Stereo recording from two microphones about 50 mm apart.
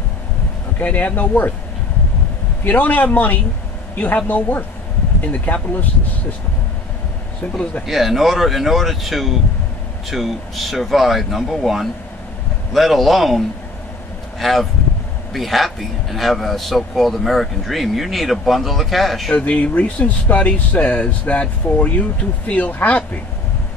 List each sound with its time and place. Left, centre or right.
0.7 s a man's voice: left
2.6 s a man's voice: left
7.8 s speech: centre
14.4 s speech: centre
19.3 s a man's voice: left